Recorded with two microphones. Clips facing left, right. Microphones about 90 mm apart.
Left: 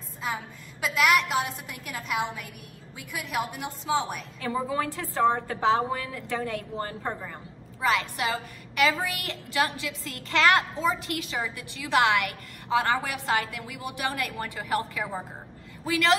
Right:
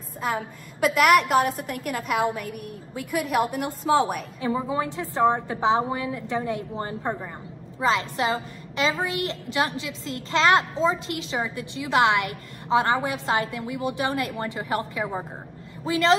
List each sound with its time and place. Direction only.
0.8 s a woman's voice: 50° right (ahead or behind)
4.4 s a woman's voice: 20° right (ahead or behind)